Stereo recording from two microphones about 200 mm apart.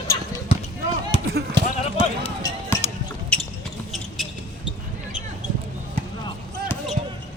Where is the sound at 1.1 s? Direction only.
30° left (ahead or behind).